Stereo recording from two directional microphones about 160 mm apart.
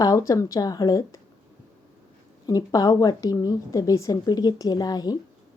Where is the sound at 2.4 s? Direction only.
20° left (ahead or behind).